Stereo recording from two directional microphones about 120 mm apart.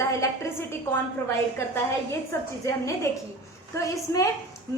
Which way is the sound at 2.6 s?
25° left (ahead or behind).